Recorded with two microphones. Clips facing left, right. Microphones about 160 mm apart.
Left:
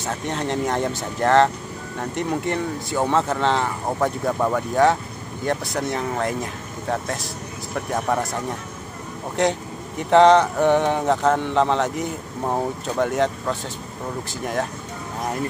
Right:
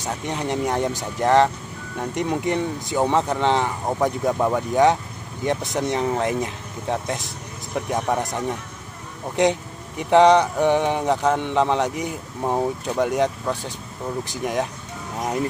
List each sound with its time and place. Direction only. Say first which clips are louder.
0.0 s speech: left 1 dB; 15° right (ahead or behind)
7.7 s speech: even; 20° right (ahead or behind)
9.4 s speech: right 2 dB; 15° right (ahead or behind)